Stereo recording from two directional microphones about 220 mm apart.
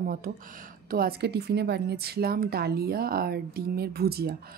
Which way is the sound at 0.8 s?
40° right (ahead or behind).